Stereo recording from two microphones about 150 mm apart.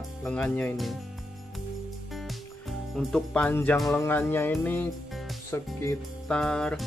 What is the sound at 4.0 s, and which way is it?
Speech, 15° left (ahead or behind).